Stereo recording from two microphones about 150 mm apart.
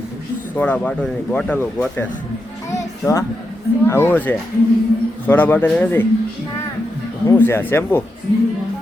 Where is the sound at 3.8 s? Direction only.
15° left (ahead or behind).